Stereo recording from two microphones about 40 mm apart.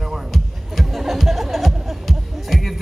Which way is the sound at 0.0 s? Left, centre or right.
Centre.